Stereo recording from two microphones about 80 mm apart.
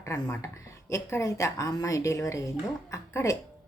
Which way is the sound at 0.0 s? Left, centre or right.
Left.